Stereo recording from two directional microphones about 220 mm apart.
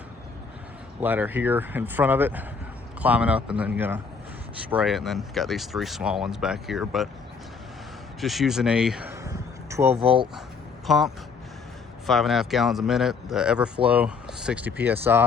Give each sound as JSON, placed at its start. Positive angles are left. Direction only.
{"t": 1.0, "sound": "speech", "side_deg": -10}
{"t": 8.2, "sound": "speech", "side_deg": 0}
{"t": 9.9, "sound": "speech", "side_deg": -25}
{"t": 10.8, "sound": "speech", "side_deg": 0}